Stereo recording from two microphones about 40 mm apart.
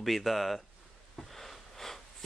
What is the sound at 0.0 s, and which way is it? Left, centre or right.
Speech, centre.